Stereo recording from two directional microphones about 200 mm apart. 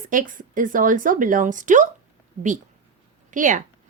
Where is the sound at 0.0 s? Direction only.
40° right (ahead or behind).